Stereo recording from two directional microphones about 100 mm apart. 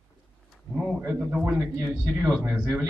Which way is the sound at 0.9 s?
15° right (ahead or behind).